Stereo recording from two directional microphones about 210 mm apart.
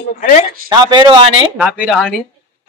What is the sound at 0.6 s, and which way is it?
Speech, 20° right (ahead or behind).